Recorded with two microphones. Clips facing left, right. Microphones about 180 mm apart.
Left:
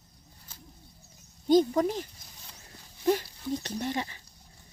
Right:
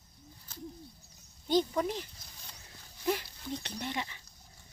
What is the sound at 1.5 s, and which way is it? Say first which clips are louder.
Speech: left 7 dB; 45° left (ahead or behind).